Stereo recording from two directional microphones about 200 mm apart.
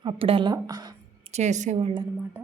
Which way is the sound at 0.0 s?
25° right (ahead or behind).